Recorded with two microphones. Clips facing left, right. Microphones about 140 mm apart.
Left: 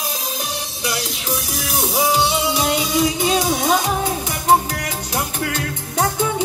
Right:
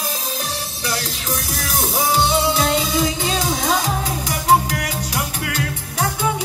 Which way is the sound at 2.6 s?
15° left (ahead or behind).